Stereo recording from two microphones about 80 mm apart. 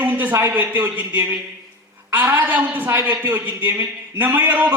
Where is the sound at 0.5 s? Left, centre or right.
Centre.